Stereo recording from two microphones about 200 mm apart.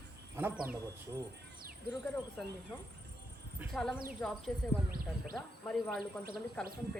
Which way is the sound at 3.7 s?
5° left (ahead or behind).